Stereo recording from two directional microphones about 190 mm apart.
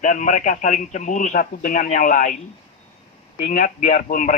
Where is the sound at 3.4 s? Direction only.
45° left (ahead or behind).